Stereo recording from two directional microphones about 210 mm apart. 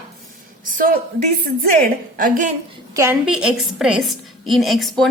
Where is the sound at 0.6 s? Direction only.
40° right (ahead or behind).